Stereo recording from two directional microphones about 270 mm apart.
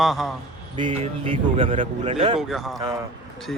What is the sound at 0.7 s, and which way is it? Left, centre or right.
Speech, centre.